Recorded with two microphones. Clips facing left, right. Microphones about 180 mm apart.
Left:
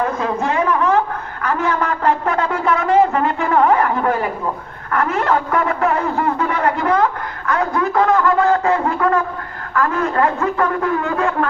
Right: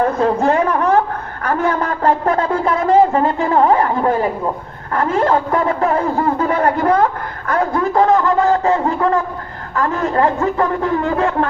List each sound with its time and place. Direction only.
0.0 s a woman's voice: 35° right (ahead or behind)